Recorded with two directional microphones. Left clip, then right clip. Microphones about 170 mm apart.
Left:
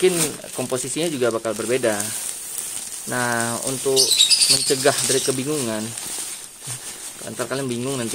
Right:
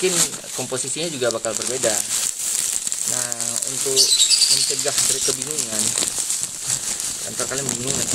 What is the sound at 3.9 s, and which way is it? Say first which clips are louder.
Speech: left 1 dB; 70° left (ahead or behind).